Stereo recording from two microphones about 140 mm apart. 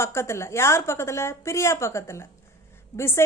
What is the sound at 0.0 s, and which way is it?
A woman's voice, 20° left (ahead or behind).